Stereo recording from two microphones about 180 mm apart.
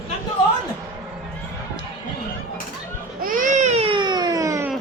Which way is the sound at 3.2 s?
50° right (ahead or behind).